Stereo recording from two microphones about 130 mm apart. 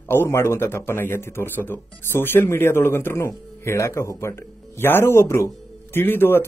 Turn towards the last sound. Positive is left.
turn(degrees=15)  # may be behind; listen again after turning